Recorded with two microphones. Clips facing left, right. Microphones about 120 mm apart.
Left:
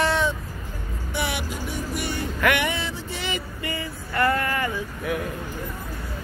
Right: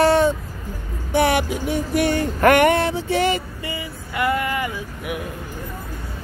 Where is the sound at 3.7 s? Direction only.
15° right (ahead or behind).